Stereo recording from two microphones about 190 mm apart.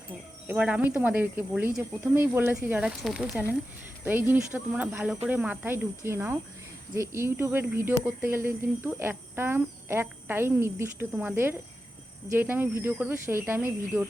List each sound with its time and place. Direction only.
0.4 s speech: 5° right (ahead or behind)